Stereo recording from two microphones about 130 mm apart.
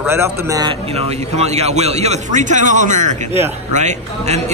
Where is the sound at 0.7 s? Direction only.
50° right (ahead or behind).